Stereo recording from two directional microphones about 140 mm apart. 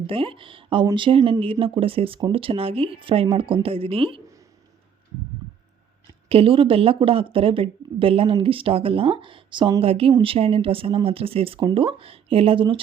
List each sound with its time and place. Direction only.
0.1 s speech: 40° right (ahead or behind)
6.2 s speech: 40° right (ahead or behind)